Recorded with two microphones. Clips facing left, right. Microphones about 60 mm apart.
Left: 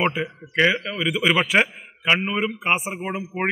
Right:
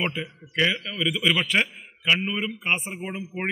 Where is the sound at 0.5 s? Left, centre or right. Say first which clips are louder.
Left 5 dB; left.